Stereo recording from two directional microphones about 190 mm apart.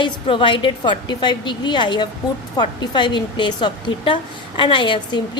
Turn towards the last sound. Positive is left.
turn(degrees=25)  # may be behind; listen again after turning